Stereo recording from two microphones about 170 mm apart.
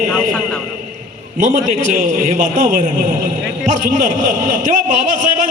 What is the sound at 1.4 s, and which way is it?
A man's voice, 50° right (ahead or behind).